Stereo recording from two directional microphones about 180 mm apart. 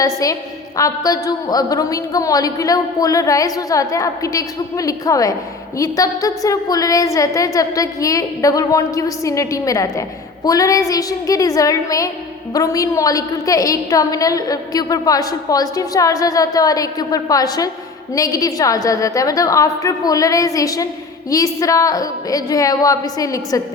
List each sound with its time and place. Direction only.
0.0 s a woman's voice: 20° left (ahead or behind)